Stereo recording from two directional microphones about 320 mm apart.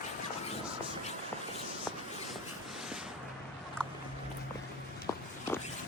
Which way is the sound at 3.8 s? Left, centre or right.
Centre.